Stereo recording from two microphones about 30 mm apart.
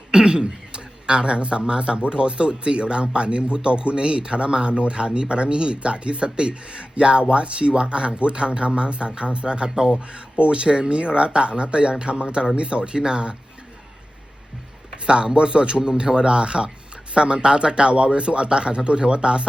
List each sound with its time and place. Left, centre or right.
0.1 s speech: right
9.6 s speech: right
10.3 s speech: right
15.0 s speech: right